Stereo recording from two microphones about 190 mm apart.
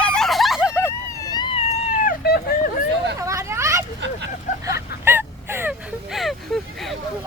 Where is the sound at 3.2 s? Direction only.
15° right (ahead or behind).